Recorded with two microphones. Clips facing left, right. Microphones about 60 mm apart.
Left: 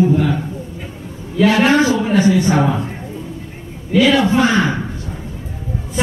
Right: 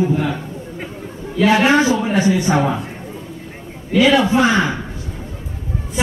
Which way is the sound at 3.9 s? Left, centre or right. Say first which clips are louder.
Even; centre.